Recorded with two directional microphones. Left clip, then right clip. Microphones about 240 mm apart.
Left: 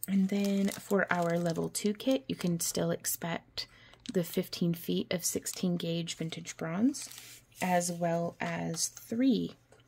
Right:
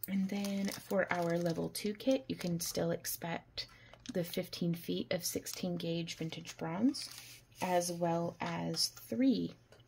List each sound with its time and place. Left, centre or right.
0.0 s speech: left